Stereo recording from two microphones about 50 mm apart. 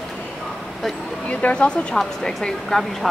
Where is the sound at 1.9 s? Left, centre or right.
Centre.